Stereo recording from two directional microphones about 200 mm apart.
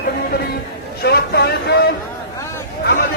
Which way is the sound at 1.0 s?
55° left (ahead or behind).